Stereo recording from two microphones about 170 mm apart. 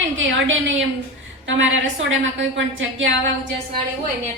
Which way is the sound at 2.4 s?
90° right.